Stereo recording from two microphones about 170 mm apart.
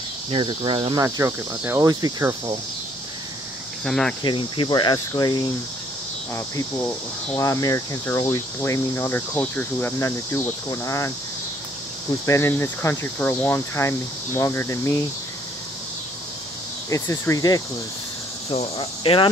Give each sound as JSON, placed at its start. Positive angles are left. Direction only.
{"t": 0.3, "sound": "cricket", "side_deg": -30}
{"t": 1.0, "sound": "cricket", "side_deg": -15}
{"t": 3.8, "sound": "cricket", "side_deg": 5}
{"t": 4.2, "sound": "speech", "side_deg": 30}
{"t": 7.3, "sound": "speech", "side_deg": 20}
{"t": 12.3, "sound": "speech", "side_deg": 15}
{"t": 16.9, "sound": "speech", "side_deg": 20}
{"t": 18.5, "sound": "cricket", "side_deg": 35}